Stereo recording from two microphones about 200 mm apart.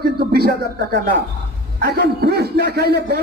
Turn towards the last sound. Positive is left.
turn(degrees=-55)  # may be behind; listen again after turning